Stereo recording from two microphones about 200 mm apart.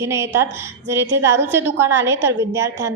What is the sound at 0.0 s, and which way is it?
A woman's voice, 15° right (ahead or behind).